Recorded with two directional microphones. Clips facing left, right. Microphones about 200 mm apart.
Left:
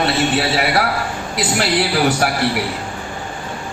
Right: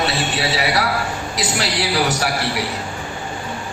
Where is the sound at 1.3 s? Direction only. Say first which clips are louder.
Left 4 dB; 55° left (ahead or behind).